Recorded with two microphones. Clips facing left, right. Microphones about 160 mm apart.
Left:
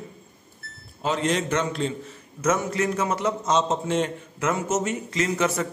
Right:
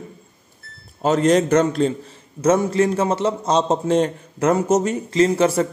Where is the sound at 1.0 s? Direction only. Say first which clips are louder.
Right 8 dB; 40° right (ahead or behind).